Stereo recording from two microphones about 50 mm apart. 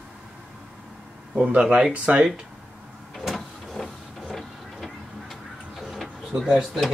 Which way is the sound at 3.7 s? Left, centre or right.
Centre.